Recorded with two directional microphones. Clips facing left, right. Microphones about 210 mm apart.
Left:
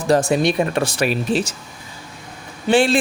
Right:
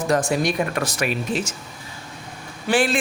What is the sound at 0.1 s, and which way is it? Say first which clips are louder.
Speech: left 5 dB; 25° left (ahead or behind).